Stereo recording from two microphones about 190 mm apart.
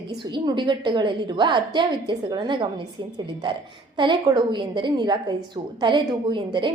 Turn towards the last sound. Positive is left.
turn(degrees=-25)  # may be behind; listen again after turning